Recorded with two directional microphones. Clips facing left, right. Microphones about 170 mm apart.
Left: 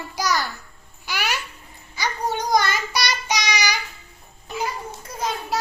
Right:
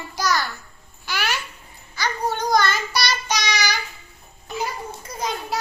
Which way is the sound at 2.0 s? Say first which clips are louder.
Right 1 dB; 15° left (ahead or behind).